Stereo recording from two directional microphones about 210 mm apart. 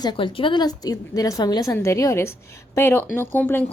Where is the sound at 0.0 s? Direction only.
20° left (ahead or behind).